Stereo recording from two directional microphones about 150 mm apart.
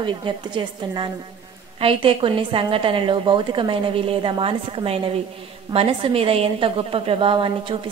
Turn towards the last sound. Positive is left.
turn(degrees=-35)  # may be behind; listen again after turning